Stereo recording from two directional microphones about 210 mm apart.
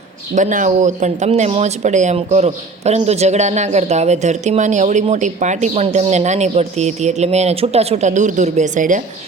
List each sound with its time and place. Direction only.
0.3 s speech: 35° right (ahead or behind)